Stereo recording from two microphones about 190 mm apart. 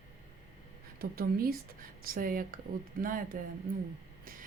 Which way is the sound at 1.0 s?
50° right (ahead or behind).